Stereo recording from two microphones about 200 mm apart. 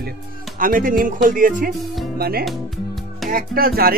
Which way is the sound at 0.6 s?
45° right (ahead or behind).